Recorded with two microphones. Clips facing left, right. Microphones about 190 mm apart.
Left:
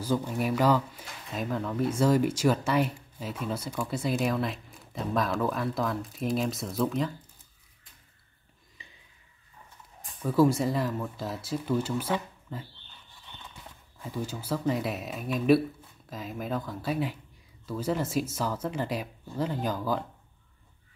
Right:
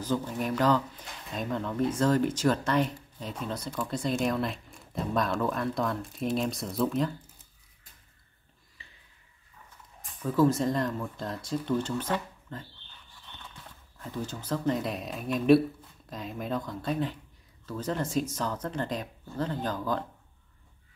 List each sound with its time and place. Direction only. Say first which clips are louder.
0.0 s speech: left 2 dB; 10° left (ahead or behind)
8.8 s a sound: left 2 dB; 15° left (ahead or behind)
10.2 s speech: left 1 dB; 10° left (ahead or behind)
13.9 s speech: left 1 dB; 10° left (ahead or behind)